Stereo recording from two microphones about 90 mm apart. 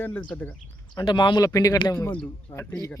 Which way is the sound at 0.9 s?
55° left (ahead or behind).